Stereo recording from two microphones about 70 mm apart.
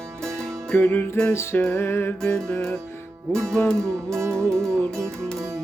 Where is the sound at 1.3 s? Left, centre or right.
Left.